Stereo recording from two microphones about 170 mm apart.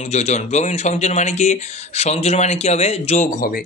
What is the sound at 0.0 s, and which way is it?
A man's voice, 40° left (ahead or behind).